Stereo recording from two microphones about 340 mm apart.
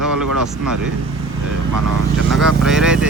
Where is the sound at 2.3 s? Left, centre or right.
Centre.